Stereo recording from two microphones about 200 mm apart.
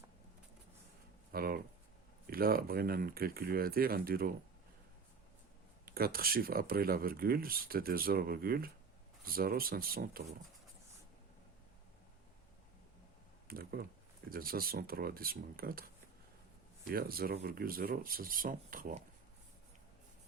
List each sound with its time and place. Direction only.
1.3 s speech: 50° right (ahead or behind)
5.8 s speech: 50° right (ahead or behind)
13.5 s speech: 50° right (ahead or behind)